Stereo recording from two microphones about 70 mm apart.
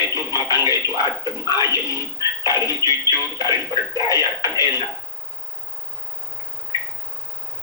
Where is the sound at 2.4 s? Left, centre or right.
Left.